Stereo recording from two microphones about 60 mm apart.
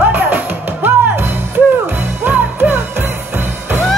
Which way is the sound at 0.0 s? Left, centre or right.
Right.